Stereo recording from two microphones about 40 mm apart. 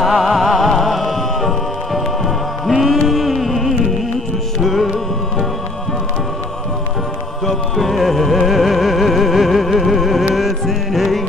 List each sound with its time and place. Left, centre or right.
0.0 s music: centre
7.4 s music: centre